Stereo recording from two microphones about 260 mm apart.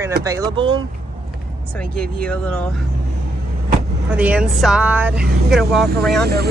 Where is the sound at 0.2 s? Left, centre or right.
Centre.